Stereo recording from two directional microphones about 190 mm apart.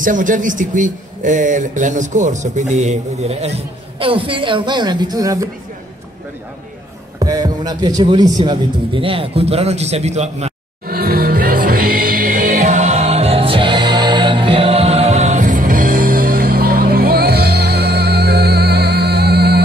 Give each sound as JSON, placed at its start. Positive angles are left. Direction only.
{"t": 0.0, "sound": "a man's voice", "side_deg": -45}
{"t": 7.2, "sound": "speech", "side_deg": -20}
{"t": 10.9, "sound": "music", "side_deg": -50}